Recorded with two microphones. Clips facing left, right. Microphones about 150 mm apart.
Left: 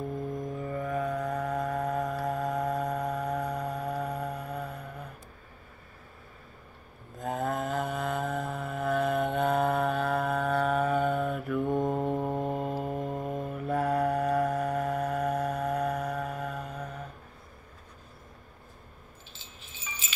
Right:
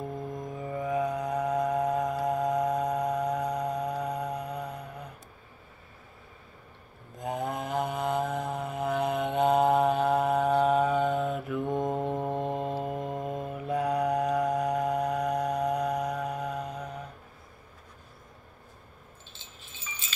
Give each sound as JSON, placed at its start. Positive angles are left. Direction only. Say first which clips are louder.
{"t": 0.6, "sound": "music", "louder": "right 4 dB", "side_deg": -15}
{"t": 7.2, "sound": "mantra", "louder": "left 1 dB", "side_deg": -15}
{"t": 11.9, "sound": "music", "louder": "left 1 dB", "side_deg": 0}
{"t": 12.9, "sound": "mantra", "louder": "even", "side_deg": -15}